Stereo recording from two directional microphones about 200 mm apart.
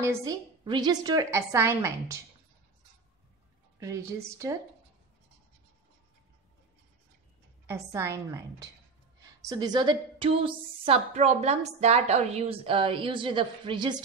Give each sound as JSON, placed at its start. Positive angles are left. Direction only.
{"t": 0.0, "sound": "a woman's voice", "side_deg": -15}
{"t": 3.8, "sound": "a woman's voice", "side_deg": -15}
{"t": 7.6, "sound": "a woman's voice", "side_deg": -15}